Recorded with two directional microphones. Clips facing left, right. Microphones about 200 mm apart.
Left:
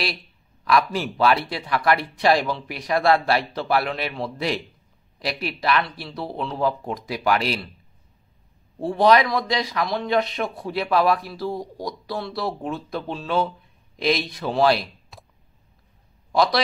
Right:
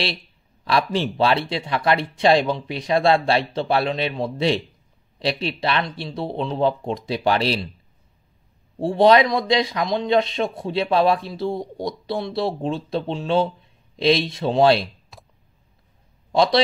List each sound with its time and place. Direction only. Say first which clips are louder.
0.7 s speech: even; 30° right (ahead or behind)
8.7 s speech: right 3 dB; 25° right (ahead or behind)
15.1 s clicking: even; centre (ahead or behind)
16.3 s a man's voice: right 3 dB; 25° right (ahead or behind)